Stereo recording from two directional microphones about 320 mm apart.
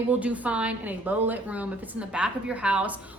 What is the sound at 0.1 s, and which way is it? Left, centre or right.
A woman's voice, centre.